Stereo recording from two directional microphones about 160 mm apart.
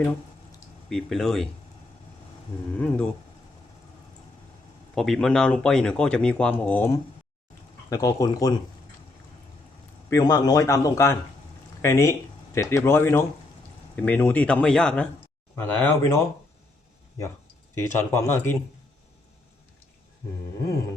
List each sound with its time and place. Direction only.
0.9 s speech: centre (ahead or behind)
2.7 s speech: 5° left (ahead or behind)
4.9 s a man's voice: centre (ahead or behind); by 8.5 s 20° left (ahead or behind)
10.1 s a man's voice: 20° left (ahead or behind)
17.7 s speech: 15° left (ahead or behind)